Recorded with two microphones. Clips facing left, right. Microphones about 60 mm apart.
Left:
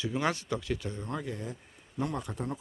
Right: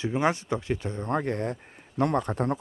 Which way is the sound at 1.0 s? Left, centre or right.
Right.